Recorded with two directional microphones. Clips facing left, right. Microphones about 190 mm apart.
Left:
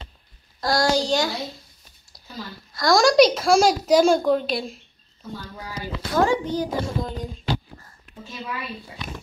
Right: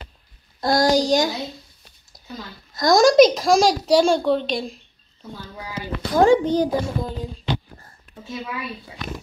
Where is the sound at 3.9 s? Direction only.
10° left (ahead or behind).